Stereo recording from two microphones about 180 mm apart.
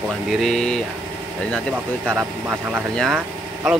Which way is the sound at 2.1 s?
10° right (ahead or behind).